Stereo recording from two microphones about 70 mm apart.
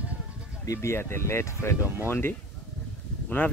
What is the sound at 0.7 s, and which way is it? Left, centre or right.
Speech, left.